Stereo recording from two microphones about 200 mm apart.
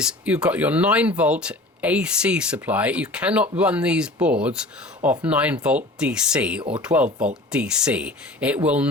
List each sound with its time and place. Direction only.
0.0 s speech: 5° right (ahead or behind)
6.6 s speech: 25° right (ahead or behind)
6.8 s speech: 5° right (ahead or behind)